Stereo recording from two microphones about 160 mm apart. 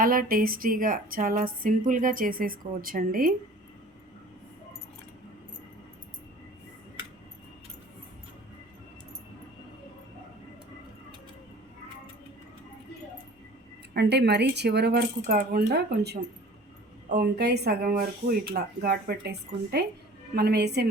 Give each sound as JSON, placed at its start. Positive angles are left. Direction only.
{"t": 0.0, "sound": "a woman's voice", "side_deg": -60}
{"t": 13.9, "sound": "speech", "side_deg": -90}
{"t": 17.2, "sound": "speech", "side_deg": -90}